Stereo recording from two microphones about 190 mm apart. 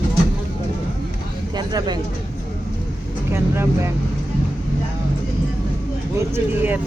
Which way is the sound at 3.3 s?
15° right (ahead or behind).